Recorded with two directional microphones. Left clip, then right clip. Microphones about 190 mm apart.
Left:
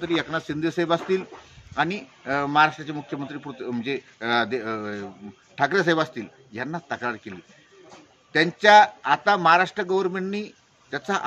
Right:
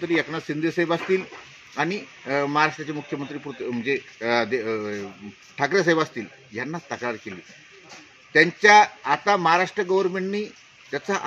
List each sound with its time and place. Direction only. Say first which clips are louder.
0.0 s speech: right 1 dB; 15° left (ahead or behind)